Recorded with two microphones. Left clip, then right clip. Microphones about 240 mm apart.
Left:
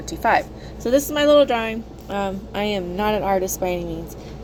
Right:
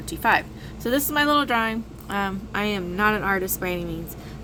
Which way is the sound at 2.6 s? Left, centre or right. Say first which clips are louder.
Left 1 dB; right.